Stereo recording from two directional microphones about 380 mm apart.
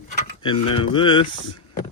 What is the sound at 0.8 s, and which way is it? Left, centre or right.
Speech, centre.